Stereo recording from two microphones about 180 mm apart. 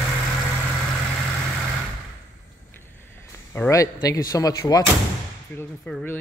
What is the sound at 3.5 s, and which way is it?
Speech, 15° left (ahead or behind).